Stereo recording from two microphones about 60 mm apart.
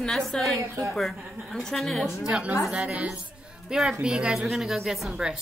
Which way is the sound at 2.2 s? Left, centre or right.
Centre.